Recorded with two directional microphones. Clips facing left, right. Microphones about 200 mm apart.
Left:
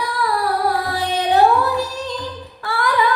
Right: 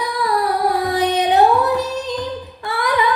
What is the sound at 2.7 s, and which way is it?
Female singing, 20° right (ahead or behind).